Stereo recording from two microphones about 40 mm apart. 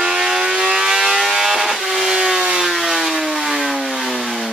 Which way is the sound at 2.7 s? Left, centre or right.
Centre.